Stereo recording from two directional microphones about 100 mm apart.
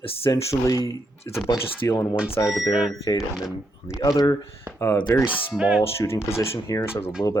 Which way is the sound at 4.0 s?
40° left (ahead or behind).